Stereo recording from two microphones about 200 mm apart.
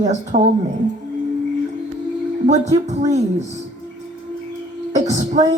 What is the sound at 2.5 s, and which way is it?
Speech, 35° right (ahead or behind).